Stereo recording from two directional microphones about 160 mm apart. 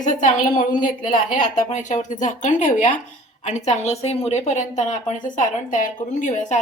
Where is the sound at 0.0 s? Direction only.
50° left (ahead or behind).